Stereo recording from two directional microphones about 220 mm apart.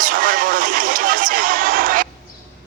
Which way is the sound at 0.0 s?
40° right (ahead or behind).